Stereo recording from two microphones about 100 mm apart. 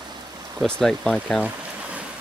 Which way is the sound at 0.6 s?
10° left (ahead or behind).